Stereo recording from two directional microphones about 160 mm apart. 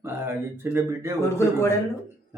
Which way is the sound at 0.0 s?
15° right (ahead or behind).